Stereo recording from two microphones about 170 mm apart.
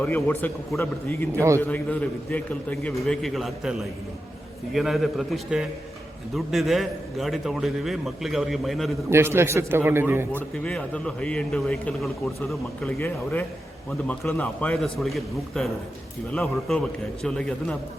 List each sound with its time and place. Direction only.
0.0 s a man's voice: 10° left (ahead or behind)
1.4 s a man's voice: 15° right (ahead or behind)
1.6 s a man's voice: 10° left (ahead or behind)
9.0 s a man's voice: 15° right (ahead or behind)
10.5 s a man's voice: 5° left (ahead or behind)
14.1 s a man's voice: 10° left (ahead or behind)